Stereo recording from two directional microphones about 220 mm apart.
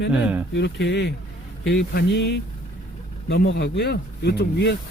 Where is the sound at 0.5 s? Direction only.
50° left (ahead or behind).